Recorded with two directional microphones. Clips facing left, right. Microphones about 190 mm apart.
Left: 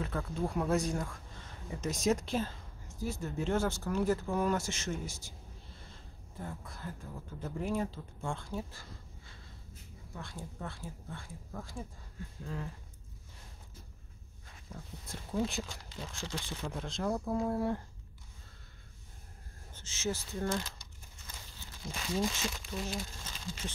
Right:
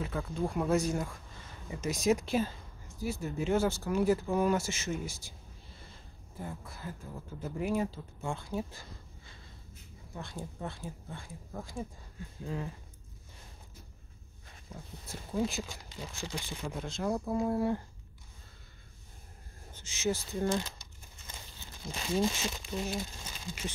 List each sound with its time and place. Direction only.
0.2 s speech: centre (ahead or behind)
6.4 s speech: 5° right (ahead or behind)
16.1 s speech: 5° right (ahead or behind)
19.7 s crumpling: 15° right (ahead or behind)
22.1 s speech: 20° right (ahead or behind)